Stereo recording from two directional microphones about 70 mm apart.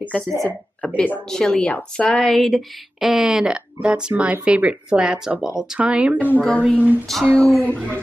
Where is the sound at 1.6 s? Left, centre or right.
Centre.